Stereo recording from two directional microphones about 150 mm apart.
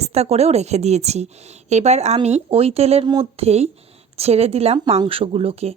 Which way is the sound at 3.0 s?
30° right (ahead or behind).